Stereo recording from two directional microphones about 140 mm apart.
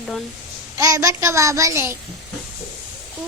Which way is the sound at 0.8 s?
25° right (ahead or behind).